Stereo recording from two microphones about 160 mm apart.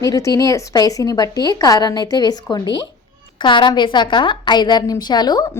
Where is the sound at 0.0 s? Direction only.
20° left (ahead or behind).